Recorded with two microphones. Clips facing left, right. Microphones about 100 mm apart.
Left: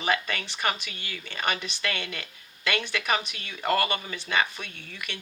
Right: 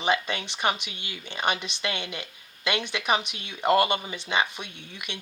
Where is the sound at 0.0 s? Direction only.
20° right (ahead or behind).